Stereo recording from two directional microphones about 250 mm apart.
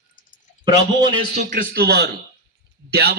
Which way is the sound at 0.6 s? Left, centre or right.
Centre.